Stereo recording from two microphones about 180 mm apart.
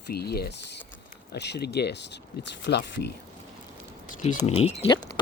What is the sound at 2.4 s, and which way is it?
Speech, 85° left.